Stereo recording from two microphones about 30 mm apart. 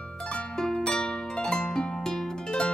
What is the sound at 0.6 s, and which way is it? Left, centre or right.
Harp, centre.